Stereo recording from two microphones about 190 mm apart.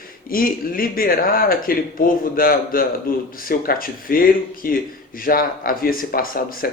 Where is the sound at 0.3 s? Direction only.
50° left (ahead or behind).